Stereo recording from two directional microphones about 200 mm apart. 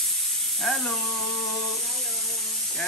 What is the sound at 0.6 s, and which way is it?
Speech, centre (ahead or behind).